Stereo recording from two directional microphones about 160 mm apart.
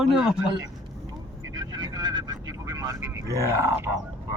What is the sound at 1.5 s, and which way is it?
Vehicle, 25° right (ahead or behind).